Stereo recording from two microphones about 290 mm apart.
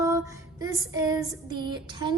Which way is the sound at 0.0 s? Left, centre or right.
Centre.